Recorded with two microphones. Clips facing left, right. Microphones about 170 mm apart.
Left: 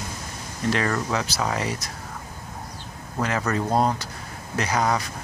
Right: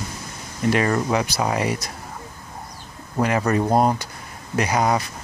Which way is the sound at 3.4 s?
15° right (ahead or behind).